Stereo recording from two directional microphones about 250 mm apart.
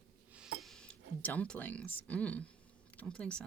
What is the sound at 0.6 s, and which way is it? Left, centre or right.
Speech, centre.